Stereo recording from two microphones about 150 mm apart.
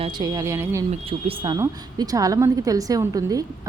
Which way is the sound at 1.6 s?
25° right (ahead or behind).